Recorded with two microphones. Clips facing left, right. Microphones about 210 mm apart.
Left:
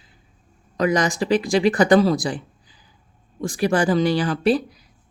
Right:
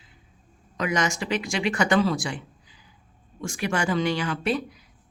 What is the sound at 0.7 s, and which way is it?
A woman's voice, 35° left (ahead or behind).